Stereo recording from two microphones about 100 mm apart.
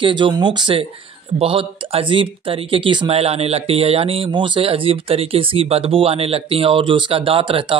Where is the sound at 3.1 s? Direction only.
90° right.